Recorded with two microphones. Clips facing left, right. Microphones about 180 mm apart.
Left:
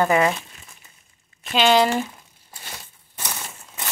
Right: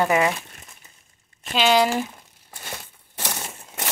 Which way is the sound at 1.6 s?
5° right (ahead or behind).